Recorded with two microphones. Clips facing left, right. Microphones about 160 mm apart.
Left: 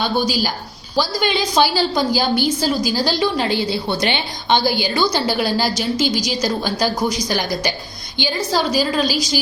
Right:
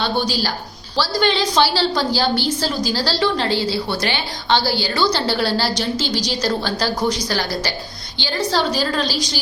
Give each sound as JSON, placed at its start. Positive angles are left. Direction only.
{"t": 0.0, "sound": "a woman's voice", "side_deg": 10}